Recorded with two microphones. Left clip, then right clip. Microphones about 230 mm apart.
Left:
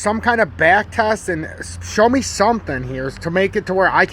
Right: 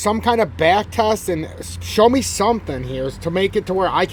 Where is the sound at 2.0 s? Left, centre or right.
Centre.